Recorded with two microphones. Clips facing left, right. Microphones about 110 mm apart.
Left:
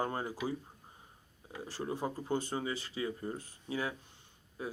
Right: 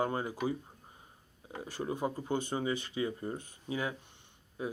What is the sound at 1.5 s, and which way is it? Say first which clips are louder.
Speech: right 2 dB; 15° right (ahead or behind).